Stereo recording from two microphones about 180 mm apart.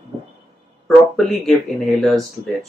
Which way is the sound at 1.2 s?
Centre (ahead or behind).